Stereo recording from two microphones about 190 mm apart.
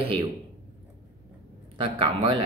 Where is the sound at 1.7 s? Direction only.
30° right (ahead or behind).